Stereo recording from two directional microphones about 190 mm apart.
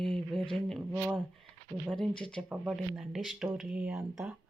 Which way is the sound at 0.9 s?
15° right (ahead or behind).